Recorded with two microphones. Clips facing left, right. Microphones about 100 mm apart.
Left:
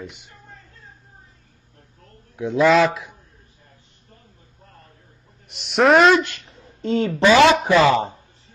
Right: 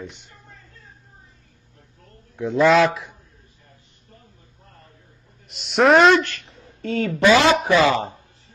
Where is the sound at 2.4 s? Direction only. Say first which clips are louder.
Even; centre (ahead or behind).